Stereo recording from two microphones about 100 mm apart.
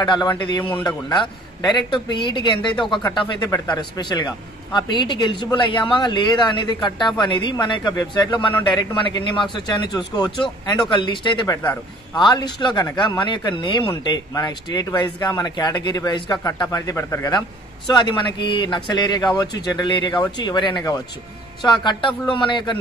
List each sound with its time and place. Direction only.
0.0 s speech: 45° left (ahead or behind)
10.8 s speech: 55° left (ahead or behind)
11.6 s a man's voice: 20° left (ahead or behind)
12.2 s speech: 50° left (ahead or behind)
16.7 s speech: 30° left (ahead or behind)
17.8 s speech: 50° left (ahead or behind)
21.8 s speech: 50° left (ahead or behind)